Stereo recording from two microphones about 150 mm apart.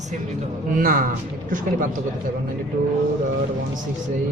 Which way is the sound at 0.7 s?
70° right (ahead or behind).